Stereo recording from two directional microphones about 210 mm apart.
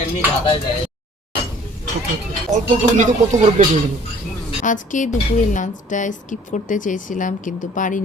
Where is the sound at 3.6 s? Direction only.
35° right (ahead or behind).